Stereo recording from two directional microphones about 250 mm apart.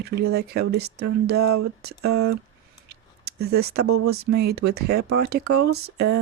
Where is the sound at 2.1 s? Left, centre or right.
Right.